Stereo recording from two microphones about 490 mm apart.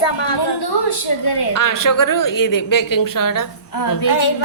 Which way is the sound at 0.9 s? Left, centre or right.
Left.